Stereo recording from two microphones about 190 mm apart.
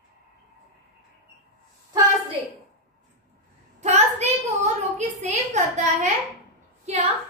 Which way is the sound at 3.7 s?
35° right (ahead or behind).